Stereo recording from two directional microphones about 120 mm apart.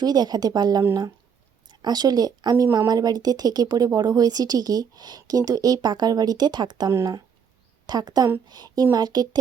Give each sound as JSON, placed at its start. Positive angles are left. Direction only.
{"t": 0.0, "sound": "a woman's voice", "side_deg": -35}